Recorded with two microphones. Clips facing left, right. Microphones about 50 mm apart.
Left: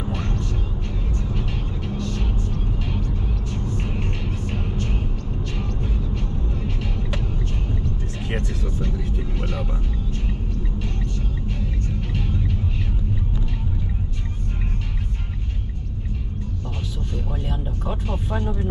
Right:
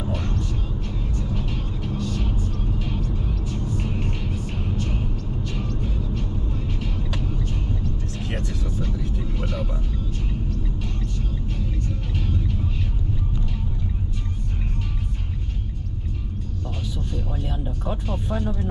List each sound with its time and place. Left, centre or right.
0.0 s vehicle: centre
3.7 s music: centre
5.8 s vehicle: centre
8.2 s music: centre
8.8 s vehicle: centre
12.1 s vehicle: centre
17.5 s music: centre